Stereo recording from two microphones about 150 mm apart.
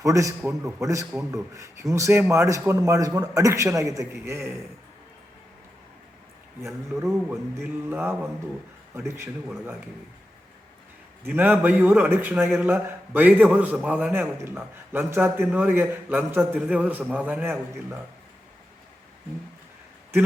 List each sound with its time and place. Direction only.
0.0 s a man's voice: 20° right (ahead or behind)
7.0 s a man's voice: 15° right (ahead or behind)
11.2 s a man's voice: 10° right (ahead or behind)